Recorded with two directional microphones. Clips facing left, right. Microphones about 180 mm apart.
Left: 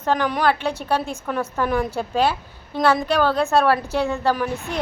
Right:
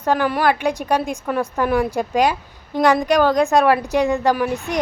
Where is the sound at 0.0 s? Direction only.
10° right (ahead or behind).